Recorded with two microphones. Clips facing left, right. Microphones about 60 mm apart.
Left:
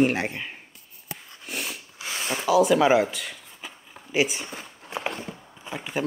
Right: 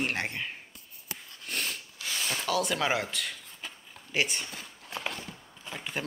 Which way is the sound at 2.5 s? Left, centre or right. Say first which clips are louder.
Left 11 dB; centre.